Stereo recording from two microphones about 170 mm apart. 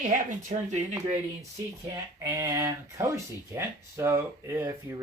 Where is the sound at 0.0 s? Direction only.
45° right (ahead or behind).